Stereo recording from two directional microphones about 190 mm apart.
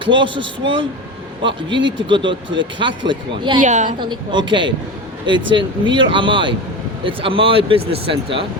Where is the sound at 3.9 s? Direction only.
25° right (ahead or behind).